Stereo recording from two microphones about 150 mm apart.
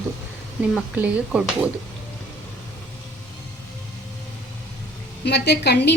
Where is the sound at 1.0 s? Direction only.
10° right (ahead or behind).